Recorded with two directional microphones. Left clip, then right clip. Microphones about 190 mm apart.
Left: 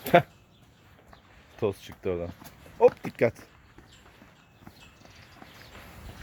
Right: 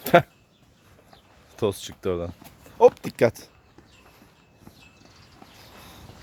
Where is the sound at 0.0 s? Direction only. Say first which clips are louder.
Right 3 dB; 40° right (ahead or behind).